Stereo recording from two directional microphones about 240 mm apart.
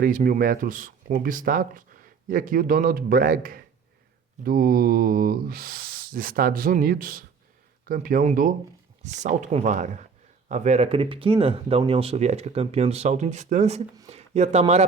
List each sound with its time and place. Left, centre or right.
0.0 s speech: right
13.9 s speech: centre
14.2 s speech: right